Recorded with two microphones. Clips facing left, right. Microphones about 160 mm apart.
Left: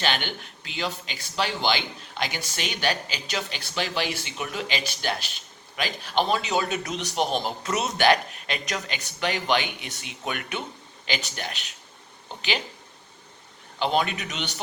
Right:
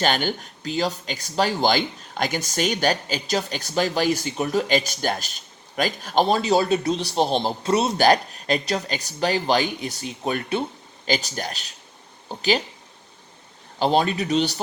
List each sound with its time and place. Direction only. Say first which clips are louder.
0.0 s speech: right 6 dB; 40° right (ahead or behind)
13.7 s speech: right 5 dB; 35° right (ahead or behind)